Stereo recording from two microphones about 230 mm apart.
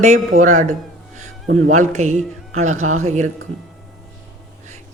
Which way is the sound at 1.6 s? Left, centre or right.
Right.